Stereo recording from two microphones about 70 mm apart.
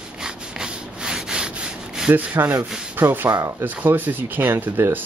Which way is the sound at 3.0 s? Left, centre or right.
Right.